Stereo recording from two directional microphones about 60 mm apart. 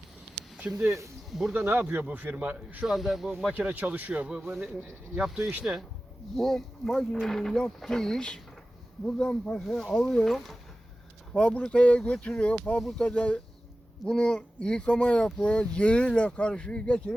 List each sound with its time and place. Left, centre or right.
0.7 s speech: right
1.3 s speech: centre
1.5 s a man's voice: right
2.8 s speech: centre
3.5 s a man's voice: right; by 5.5 s centre
6.3 s speech: centre
11.3 s speech: centre